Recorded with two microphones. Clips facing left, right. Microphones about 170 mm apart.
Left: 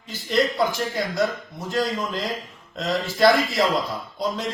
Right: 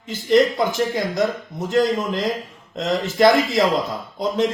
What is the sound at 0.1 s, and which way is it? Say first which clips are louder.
A man's voice: right 6 dB; 20° right (ahead or behind).